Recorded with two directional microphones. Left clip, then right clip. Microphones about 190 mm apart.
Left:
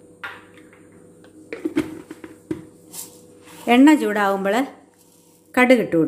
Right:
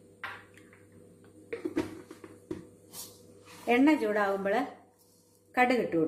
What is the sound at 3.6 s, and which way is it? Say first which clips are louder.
A woman's voice: left 11 dB; 45° left (ahead or behind).